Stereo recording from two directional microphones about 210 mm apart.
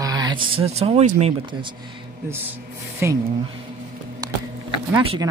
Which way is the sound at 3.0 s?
10° right (ahead or behind).